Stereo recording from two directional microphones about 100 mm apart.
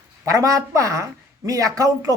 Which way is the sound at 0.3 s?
35° right (ahead or behind).